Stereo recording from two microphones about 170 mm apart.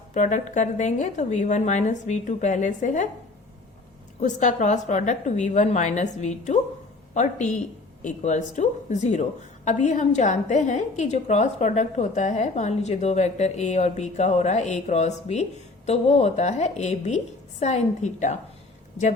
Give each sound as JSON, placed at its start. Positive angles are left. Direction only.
{"t": 0.1, "sound": "a woman's voice", "side_deg": 45}
{"t": 4.2, "sound": "a woman's voice", "side_deg": 45}